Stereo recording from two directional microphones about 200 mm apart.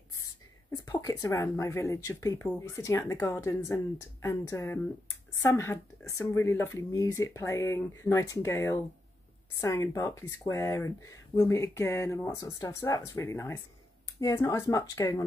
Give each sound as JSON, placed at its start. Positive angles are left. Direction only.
{"t": 0.7, "sound": "speech", "side_deg": 15}